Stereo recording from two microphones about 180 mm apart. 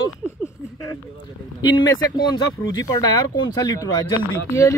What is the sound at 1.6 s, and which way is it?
Speech, 20° left (ahead or behind).